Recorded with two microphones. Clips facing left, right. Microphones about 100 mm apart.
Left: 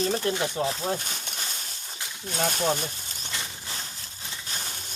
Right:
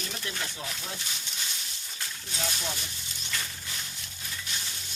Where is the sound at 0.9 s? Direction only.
45° left (ahead or behind).